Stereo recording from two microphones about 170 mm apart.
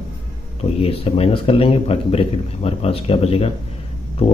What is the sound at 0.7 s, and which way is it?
A man's voice, 35° left (ahead or behind).